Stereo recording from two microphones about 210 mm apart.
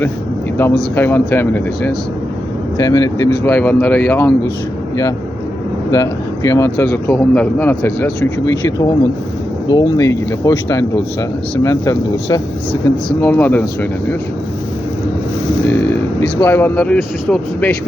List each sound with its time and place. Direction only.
0.8 s a man's voice: 10° left (ahead or behind)
2.7 s a man's voice: 20° left (ahead or behind)
3.4 s speech: 5° left (ahead or behind)
5.9 s a man's voice: 15° left (ahead or behind)
16.2 s speech: 10° left (ahead or behind)